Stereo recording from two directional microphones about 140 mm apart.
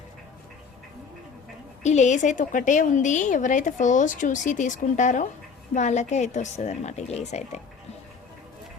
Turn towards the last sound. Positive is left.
turn(degrees=55)  # may be behind; listen again after turning